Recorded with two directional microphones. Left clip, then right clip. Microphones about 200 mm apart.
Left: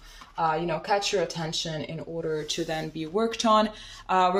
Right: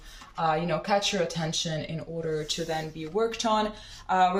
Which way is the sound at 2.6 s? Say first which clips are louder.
Left 1 dB; 50° left (ahead or behind).